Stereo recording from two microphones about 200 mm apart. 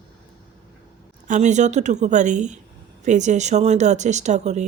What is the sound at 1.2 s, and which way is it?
Speech, 40° right (ahead or behind).